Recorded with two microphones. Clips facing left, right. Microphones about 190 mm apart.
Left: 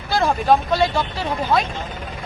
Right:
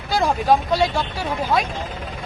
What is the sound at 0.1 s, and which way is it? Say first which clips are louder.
Speech: left 1 dB; 15° right (ahead or behind).